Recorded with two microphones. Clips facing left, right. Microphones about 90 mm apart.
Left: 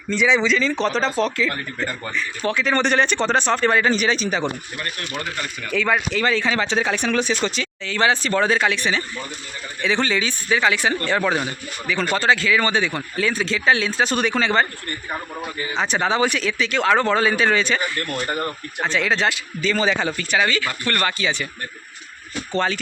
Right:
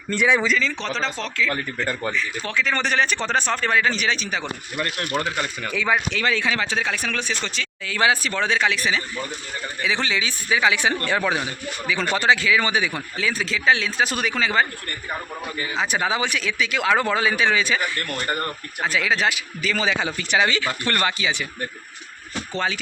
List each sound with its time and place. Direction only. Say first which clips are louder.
0.1 s a man's voice: left 1 dB; 10° right (ahead or behind)
0.8 s speech: left 6 dB; 5° left (ahead or behind)
5.2 s speech: right 3 dB; 20° right (ahead or behind)
5.7 s a man's voice: left 3 dB; 10° right (ahead or behind)
15.7 s speech: left 2 dB; 5° right (ahead or behind)
18.0 s a man's voice: left 1 dB; 5° left (ahead or behind); by 21.4 s 15° right (ahead or behind)
22.5 s a man's voice: left 4 dB; 5° right (ahead or behind)